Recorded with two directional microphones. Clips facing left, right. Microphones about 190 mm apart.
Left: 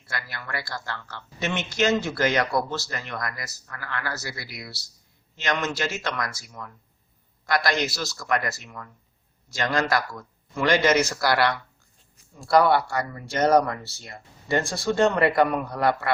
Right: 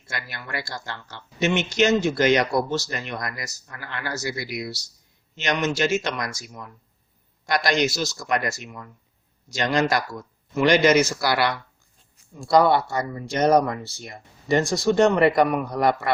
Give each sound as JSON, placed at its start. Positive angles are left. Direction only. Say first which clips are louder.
{"t": 0.1, "sound": "a man's voice", "louder": "right 1 dB", "side_deg": -20}